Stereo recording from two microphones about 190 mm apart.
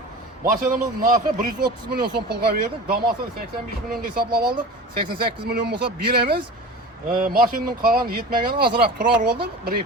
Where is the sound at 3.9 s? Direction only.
55° right (ahead or behind).